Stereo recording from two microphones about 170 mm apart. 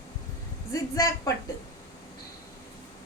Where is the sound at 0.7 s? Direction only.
20° left (ahead or behind).